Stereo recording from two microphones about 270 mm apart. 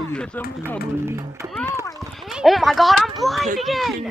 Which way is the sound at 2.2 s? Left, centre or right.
Centre.